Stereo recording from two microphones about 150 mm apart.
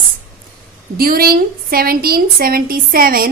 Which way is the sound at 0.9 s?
80° right.